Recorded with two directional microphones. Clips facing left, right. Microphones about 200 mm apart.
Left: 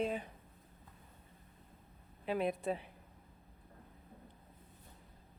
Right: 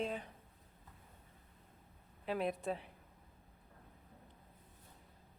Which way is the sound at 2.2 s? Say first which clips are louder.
Left 2 dB; centre (ahead or behind).